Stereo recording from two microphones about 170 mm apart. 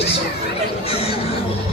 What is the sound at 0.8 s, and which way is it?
Speech, 35° left (ahead or behind).